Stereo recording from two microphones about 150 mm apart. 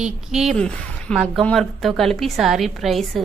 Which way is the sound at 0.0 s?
5° right (ahead or behind).